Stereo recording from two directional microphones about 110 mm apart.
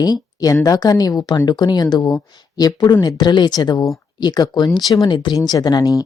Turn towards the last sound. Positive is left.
turn(degrees=35)  # may be behind; listen again after turning